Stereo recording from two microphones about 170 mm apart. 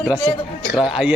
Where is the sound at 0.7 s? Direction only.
5° right (ahead or behind).